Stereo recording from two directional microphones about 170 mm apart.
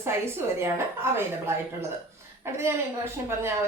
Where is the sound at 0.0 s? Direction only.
15° right (ahead or behind).